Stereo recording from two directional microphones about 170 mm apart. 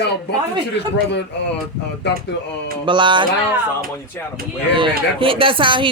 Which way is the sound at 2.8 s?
30° right (ahead or behind).